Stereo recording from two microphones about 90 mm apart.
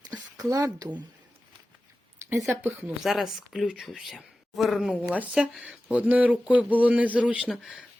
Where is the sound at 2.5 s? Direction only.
20° right (ahead or behind).